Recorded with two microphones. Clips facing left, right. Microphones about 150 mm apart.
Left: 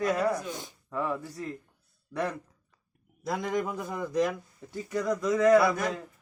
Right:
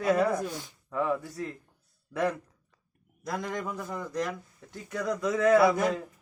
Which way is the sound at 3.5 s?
10° left (ahead or behind).